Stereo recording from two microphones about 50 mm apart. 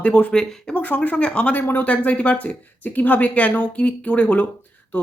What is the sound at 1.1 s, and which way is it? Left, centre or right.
A woman's voice, left.